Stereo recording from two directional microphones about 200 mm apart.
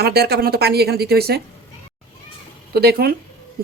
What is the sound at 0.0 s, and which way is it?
Speech, 55° right (ahead or behind).